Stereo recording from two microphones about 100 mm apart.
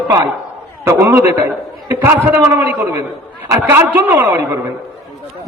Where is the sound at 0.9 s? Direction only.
25° right (ahead or behind).